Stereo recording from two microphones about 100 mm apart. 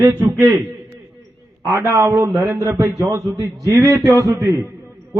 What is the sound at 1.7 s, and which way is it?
A man's voice, 30° right (ahead or behind).